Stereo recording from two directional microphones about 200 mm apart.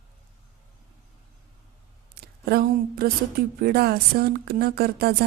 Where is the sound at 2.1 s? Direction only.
50° right (ahead or behind).